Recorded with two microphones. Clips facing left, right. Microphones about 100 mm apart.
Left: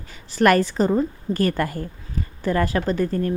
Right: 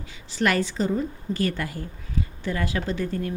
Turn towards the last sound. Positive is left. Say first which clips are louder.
# left 6 dB
turn(degrees=45)  # may be behind; listen again after turning